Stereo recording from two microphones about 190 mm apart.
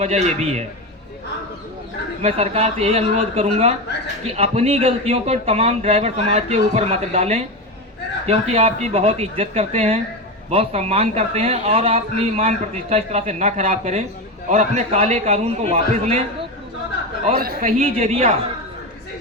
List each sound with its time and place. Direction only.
0.0 s speech: 35° right (ahead or behind)
2.2 s speech: 35° right (ahead or behind)
17.3 s speech: 50° right (ahead or behind)
17.7 s speech: 30° right (ahead or behind)